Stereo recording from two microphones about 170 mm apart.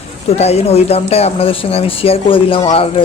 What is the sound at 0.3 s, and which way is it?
Speech, 40° left (ahead or behind).